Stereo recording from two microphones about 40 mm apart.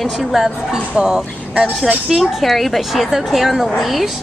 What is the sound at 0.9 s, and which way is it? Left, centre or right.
Speech, centre.